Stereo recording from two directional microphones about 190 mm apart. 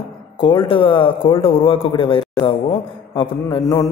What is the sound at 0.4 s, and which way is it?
A man's voice, 25° left (ahead or behind).